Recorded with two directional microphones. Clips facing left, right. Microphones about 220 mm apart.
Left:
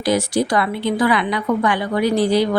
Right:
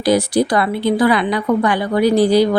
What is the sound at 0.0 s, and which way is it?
A woman's voice, 35° right (ahead or behind).